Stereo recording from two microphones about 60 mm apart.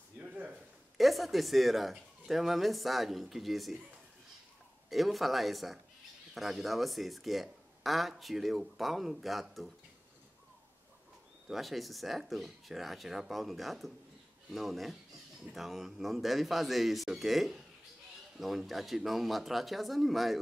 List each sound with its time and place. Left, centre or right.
0.2 s a sound: right
0.9 s speech: centre
4.8 s speech: centre
11.4 s speech: centre